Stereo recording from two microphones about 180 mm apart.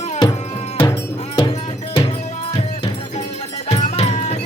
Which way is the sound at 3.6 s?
35° left (ahead or behind).